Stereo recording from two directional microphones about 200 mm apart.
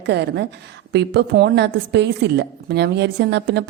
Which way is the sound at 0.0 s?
55° right (ahead or behind).